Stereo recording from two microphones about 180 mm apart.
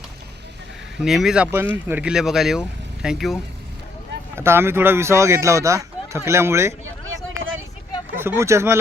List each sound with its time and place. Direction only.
0.9 s speech: centre (ahead or behind)
4.4 s speech: 15° right (ahead or behind)
8.1 s speech: 10° right (ahead or behind)